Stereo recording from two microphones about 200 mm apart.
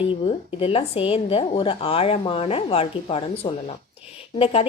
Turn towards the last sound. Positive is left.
turn(degrees=30)  # may be behind; listen again after turning